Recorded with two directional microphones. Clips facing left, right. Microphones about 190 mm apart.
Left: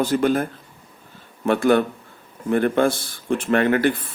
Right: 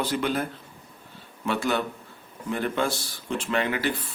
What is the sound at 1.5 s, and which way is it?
Speech, 50° left (ahead or behind).